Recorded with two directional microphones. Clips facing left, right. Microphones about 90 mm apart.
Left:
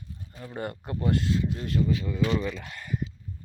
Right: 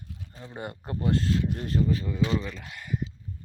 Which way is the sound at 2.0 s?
25° right (ahead or behind).